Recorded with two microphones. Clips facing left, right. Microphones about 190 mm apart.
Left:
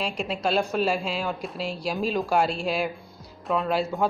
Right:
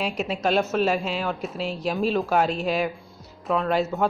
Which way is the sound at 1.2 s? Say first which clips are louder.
Right 2 dB; centre (ahead or behind).